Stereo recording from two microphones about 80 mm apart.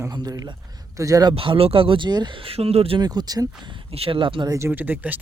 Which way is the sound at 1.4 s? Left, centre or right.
Right.